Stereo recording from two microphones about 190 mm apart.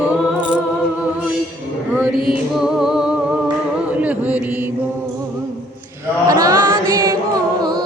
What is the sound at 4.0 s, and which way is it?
Chant, 10° right (ahead or behind).